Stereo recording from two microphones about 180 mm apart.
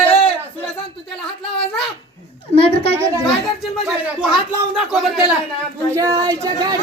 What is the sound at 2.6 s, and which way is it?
Speech, 30° left (ahead or behind).